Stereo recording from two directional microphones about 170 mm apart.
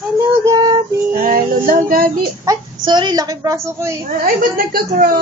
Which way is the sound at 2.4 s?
25° right (ahead or behind).